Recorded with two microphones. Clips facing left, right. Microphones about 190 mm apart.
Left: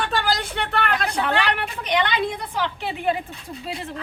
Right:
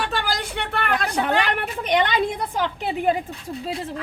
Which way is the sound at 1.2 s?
50° right (ahead or behind).